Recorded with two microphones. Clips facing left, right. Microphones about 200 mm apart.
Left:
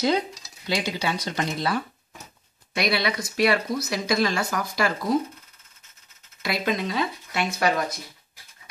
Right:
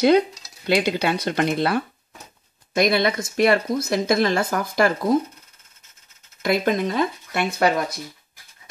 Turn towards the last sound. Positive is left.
turn(degrees=-50)  # may be behind; listen again after turning